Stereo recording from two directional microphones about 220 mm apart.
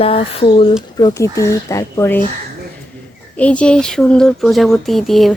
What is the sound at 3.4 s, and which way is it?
Speech, 5° left (ahead or behind).